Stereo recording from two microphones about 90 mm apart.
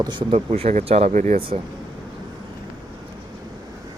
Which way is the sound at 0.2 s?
85° right.